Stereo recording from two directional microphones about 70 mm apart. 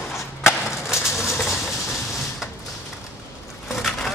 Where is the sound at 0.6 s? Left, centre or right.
Centre.